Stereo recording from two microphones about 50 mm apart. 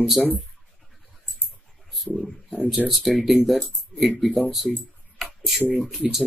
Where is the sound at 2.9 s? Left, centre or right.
Centre.